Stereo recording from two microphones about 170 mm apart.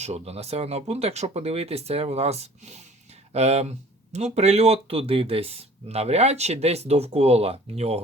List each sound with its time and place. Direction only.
0.0 s speech: 40° right (ahead or behind)